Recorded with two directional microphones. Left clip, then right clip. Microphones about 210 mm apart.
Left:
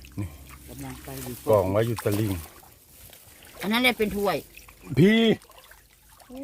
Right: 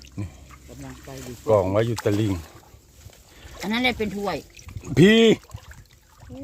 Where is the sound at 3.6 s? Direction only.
40° left (ahead or behind).